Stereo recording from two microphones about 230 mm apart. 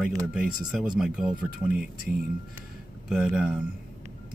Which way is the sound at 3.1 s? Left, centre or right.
Centre.